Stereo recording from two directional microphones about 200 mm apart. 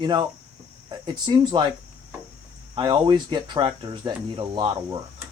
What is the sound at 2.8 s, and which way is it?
Speech, 20° right (ahead or behind).